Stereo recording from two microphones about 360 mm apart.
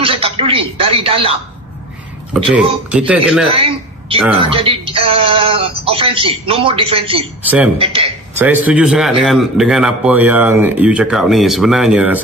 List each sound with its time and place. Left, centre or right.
0.0 s speech: centre
2.9 s a man's voice: centre
3.5 s a man's voice: centre
7.4 s a man's voice: centre
7.8 s a man's voice: centre